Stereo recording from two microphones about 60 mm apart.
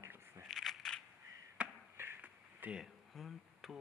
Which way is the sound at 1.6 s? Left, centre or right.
Right.